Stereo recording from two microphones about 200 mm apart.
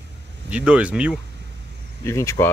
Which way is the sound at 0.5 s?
5° right (ahead or behind).